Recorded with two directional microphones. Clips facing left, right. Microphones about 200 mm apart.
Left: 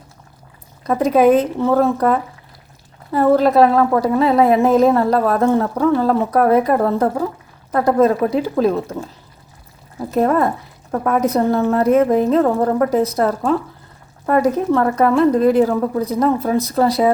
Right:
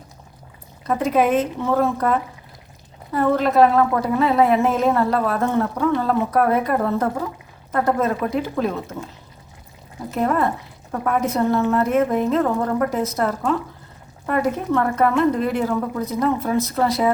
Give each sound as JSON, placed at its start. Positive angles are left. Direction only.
{"t": 0.9, "sound": "a woman's voice", "side_deg": 40}
{"t": 10.2, "sound": "a woman's voice", "side_deg": 40}